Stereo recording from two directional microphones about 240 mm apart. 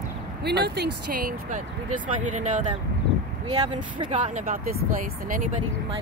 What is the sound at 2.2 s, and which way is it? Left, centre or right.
Speech, right.